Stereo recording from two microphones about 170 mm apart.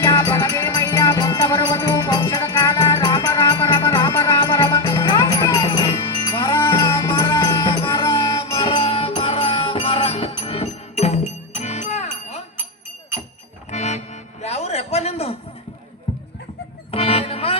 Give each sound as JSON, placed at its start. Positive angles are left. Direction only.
{"t": 0.0, "sound": "music", "side_deg": 15}
{"t": 13.7, "sound": "music", "side_deg": 40}
{"t": 14.4, "sound": "a sound", "side_deg": 40}
{"t": 16.9, "sound": "music", "side_deg": 35}